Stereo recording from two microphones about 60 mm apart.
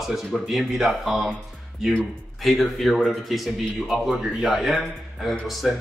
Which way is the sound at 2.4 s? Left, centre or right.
Centre.